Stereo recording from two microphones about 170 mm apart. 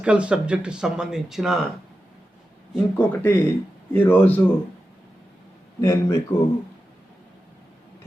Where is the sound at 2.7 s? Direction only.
10° left (ahead or behind).